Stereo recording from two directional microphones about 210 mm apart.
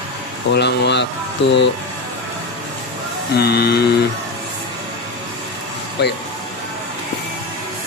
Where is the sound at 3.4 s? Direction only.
50° left (ahead or behind).